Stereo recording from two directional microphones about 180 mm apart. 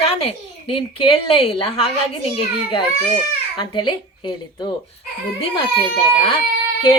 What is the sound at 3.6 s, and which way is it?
A woman's voice, 25° left (ahead or behind).